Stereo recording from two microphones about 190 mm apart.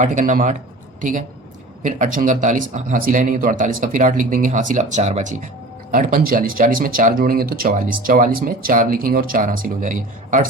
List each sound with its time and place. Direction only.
0.0 s speech: 40° right (ahead or behind)
1.8 s speech: 40° right (ahead or behind)